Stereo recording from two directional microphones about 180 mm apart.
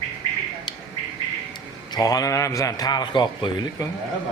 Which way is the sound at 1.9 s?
20° left (ahead or behind).